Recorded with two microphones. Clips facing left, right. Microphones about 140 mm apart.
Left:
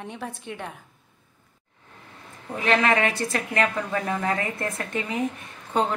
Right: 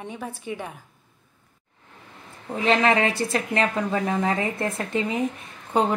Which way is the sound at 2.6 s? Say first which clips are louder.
Right 2 dB; 25° right (ahead or behind).